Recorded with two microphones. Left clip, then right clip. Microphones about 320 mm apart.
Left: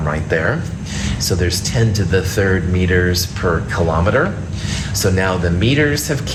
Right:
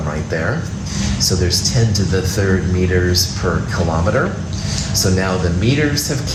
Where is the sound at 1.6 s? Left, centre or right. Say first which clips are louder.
Right 1 dB; left.